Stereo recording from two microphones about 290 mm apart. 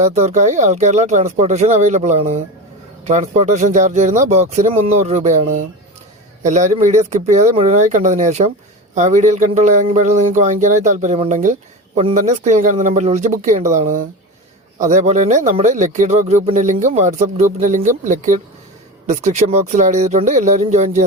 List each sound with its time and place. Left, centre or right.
0.0 s speech: right